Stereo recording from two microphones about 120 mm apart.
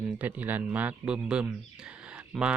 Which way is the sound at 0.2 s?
15° right (ahead or behind).